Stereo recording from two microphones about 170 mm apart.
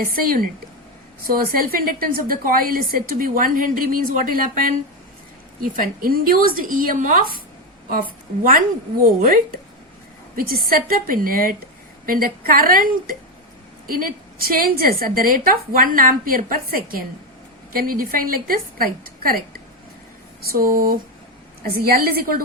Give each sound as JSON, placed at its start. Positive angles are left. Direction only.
{"t": 0.0, "sound": "a woman's voice", "side_deg": -55}
{"t": 5.7, "sound": "a woman's voice", "side_deg": -55}
{"t": 8.4, "sound": "a woman's voice", "side_deg": -55}
{"t": 20.7, "sound": "a woman's voice", "side_deg": -55}